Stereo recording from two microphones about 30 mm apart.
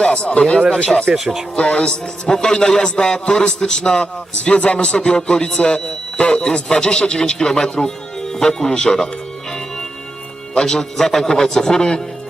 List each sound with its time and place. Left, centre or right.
0.0 s a man's voice: left
1.2 s speech: centre
1.5 s a man's voice: left
4.0 s a man's voice: left
10.5 s a man's voice: left